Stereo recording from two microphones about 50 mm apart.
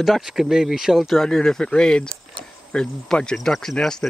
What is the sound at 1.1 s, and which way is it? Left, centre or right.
Speech, centre.